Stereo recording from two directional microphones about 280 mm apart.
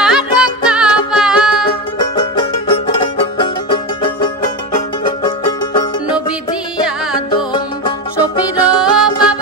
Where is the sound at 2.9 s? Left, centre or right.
Centre.